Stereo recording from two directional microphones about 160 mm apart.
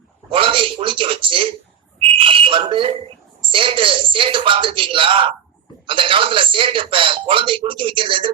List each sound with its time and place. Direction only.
0.3 s a man's voice: 30° right (ahead or behind)
2.0 s whistle: 35° right (ahead or behind)
3.4 s speech: 35° right (ahead or behind)